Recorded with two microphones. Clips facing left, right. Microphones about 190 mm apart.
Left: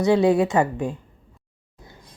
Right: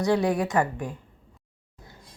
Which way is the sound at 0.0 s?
25° left (ahead or behind).